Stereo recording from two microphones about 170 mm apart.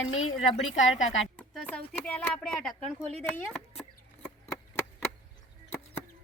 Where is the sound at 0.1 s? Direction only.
40° left (ahead or behind).